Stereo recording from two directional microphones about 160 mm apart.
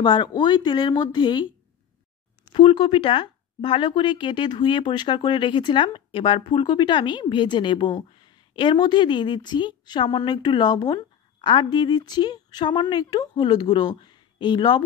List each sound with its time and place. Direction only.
0.0 s speech: 30° left (ahead or behind)
2.5 s speech: 35° left (ahead or behind)